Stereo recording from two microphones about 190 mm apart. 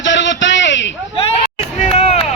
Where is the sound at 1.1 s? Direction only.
30° left (ahead or behind).